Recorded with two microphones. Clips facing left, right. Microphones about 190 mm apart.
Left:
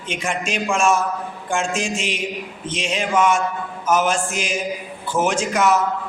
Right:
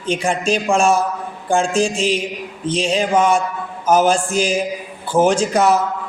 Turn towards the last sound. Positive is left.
turn(degrees=-35)  # may be behind; listen again after turning